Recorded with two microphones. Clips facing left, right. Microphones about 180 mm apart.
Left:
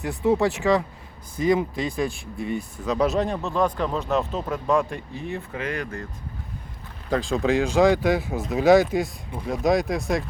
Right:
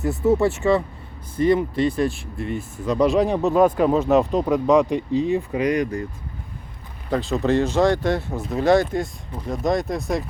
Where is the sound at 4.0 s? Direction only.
Centre (ahead or behind).